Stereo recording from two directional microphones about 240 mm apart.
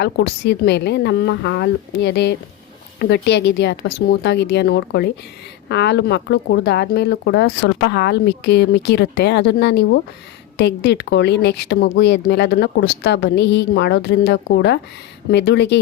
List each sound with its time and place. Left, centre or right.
0.0 s speech: left